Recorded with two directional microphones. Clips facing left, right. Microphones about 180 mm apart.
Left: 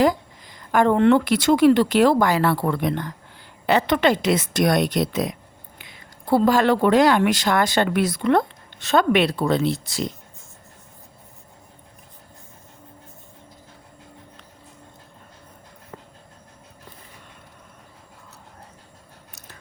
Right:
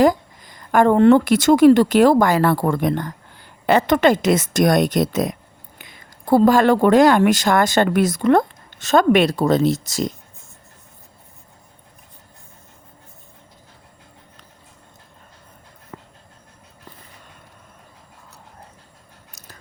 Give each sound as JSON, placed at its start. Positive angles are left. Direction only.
{"t": 0.0, "sound": "speech", "side_deg": -45}